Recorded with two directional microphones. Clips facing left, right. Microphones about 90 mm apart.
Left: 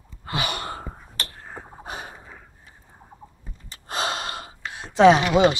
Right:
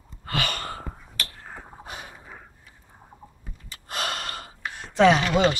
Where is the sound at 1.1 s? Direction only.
30° left (ahead or behind).